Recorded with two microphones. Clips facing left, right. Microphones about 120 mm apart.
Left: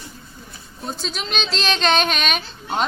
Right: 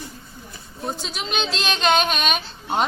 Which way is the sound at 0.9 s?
15° right (ahead or behind).